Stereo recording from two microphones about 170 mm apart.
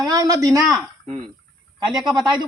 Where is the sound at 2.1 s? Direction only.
25° right (ahead or behind).